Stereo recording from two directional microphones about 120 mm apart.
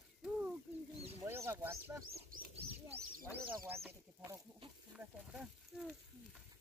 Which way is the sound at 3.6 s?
20° right (ahead or behind).